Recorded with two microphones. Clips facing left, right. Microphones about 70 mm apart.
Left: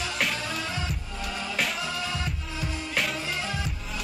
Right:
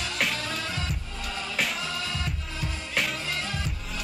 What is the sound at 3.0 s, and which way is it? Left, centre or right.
Music, centre.